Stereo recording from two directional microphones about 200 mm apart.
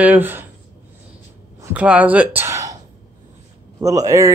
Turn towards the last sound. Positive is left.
turn(degrees=-15)  # may be behind; listen again after turning